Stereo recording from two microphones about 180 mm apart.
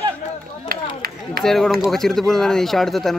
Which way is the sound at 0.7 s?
55° right (ahead or behind).